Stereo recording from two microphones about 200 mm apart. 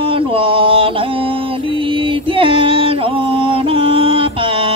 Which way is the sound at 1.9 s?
25° right (ahead or behind).